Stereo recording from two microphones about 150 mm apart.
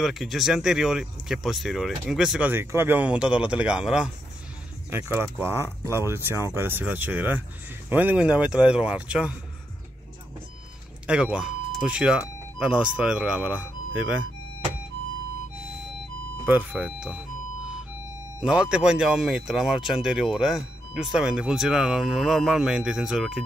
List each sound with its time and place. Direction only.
0.0 s speech: centre (ahead or behind)
11.1 s speech: 5° right (ahead or behind)
16.4 s speech: 10° right (ahead or behind)
18.4 s speech: 5° right (ahead or behind)